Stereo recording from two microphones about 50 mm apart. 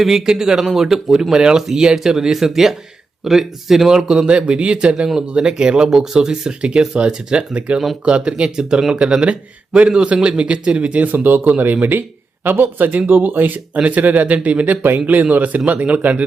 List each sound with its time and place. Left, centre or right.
0.0 s speech: centre
5.0 s speech: centre; by 16.2 s right